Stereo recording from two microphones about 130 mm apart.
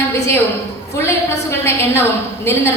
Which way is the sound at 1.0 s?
20° left (ahead or behind).